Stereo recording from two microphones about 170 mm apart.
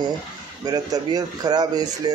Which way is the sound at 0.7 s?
20° right (ahead or behind).